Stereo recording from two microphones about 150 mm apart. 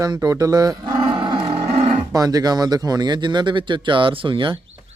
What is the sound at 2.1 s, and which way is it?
A man's voice, 25° right (ahead or behind).